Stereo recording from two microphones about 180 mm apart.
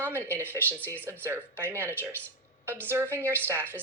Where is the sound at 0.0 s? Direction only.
15° right (ahead or behind).